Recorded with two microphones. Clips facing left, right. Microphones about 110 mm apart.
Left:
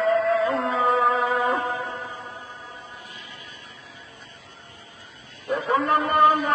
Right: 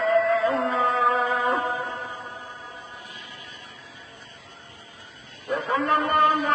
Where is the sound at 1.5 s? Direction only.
20° right (ahead or behind).